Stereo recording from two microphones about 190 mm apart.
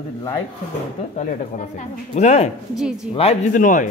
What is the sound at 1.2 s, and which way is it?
A man's voice, 40° left (ahead or behind).